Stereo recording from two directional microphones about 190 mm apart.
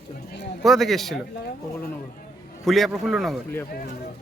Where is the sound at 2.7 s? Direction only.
Centre (ahead or behind).